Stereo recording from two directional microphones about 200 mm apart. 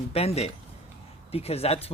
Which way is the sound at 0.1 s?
30° left (ahead or behind).